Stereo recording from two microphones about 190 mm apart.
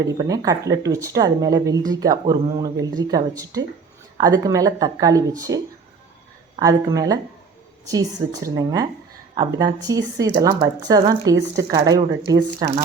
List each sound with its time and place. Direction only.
0.0 s speech: 20° right (ahead or behind)
6.6 s speech: 20° right (ahead or behind)